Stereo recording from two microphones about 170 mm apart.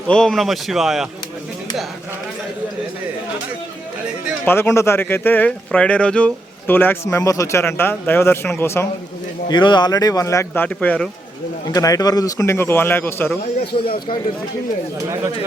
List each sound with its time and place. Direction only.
0.1 s a man's voice: 5° left (ahead or behind)
4.4 s speech: 15° left (ahead or behind)
9.5 s speech: 25° left (ahead or behind); by 11.1 s 5° left (ahead or behind)
11.7 s speech: 20° left (ahead or behind)